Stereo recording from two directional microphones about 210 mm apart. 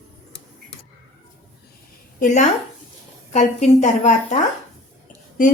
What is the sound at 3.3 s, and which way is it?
A woman's voice, 35° left (ahead or behind).